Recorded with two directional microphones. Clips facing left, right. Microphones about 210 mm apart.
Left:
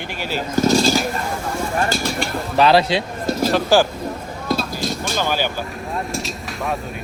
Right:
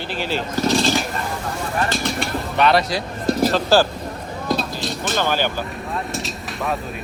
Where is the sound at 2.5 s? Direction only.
30° left (ahead or behind).